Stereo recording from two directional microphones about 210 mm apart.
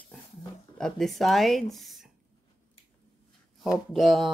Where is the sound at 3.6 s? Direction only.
Centre (ahead or behind).